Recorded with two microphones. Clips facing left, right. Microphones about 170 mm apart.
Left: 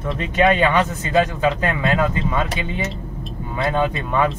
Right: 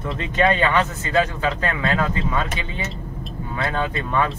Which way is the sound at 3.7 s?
15° left (ahead or behind).